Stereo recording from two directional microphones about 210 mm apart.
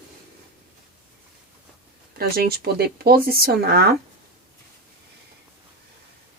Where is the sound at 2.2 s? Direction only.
45° right (ahead or behind).